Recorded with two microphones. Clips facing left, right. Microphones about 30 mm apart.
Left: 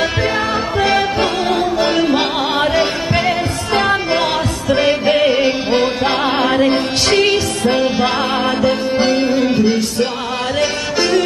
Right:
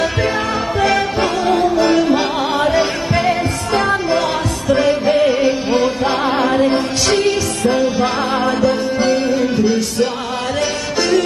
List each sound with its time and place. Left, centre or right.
1.2 s music: left
3.8 s music: left